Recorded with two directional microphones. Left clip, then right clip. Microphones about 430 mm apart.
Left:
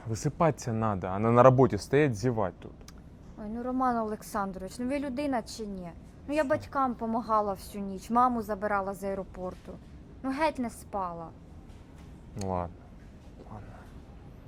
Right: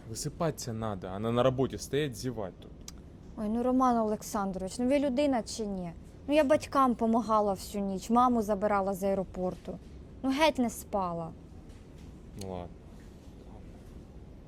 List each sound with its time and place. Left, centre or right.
0.1 s speech: left
3.3 s a woman's voice: right
12.4 s speech: left